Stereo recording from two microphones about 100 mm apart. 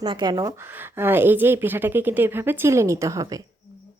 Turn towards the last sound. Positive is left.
turn(degrees=-30)  # may be behind; listen again after turning